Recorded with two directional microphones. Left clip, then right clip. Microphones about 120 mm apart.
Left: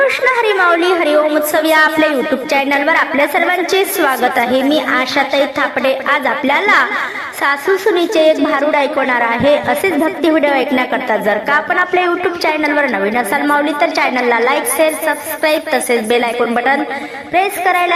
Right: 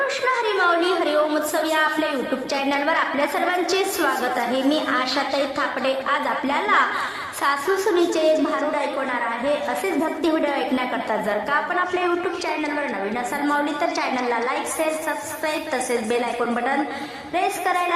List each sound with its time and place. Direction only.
0.3 s a woman's voice: 40° left (ahead or behind)